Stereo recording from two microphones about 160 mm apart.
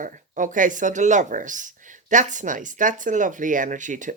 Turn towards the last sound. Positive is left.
turn(degrees=-50)  # may be behind; listen again after turning